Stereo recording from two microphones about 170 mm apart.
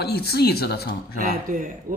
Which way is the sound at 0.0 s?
70° left (ahead or behind).